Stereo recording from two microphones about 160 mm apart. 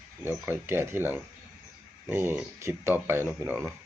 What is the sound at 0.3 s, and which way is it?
Speech, 15° right (ahead or behind).